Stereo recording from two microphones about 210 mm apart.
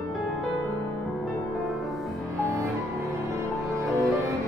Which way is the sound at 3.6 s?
15° right (ahead or behind).